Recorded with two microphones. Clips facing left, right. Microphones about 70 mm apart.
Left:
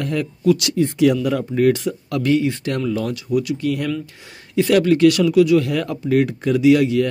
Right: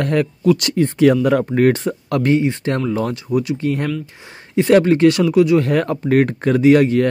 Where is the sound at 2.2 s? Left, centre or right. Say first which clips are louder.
Right 1 dB; right.